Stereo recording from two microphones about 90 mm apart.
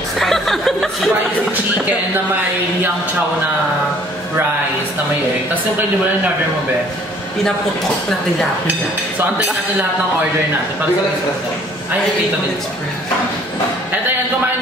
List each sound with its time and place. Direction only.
0.2 s chuckle: centre (ahead or behind)